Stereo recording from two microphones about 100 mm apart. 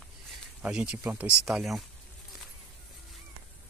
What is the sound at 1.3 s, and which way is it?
Speech, 5° right (ahead or behind).